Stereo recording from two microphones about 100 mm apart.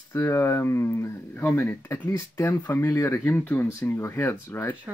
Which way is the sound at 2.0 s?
35° left (ahead or behind).